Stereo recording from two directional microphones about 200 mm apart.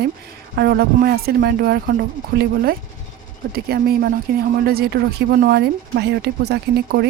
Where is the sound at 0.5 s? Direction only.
55° right (ahead or behind).